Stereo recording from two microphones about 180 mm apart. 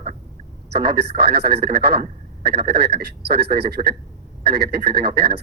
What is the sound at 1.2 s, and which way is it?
Speech, 65° right (ahead or behind).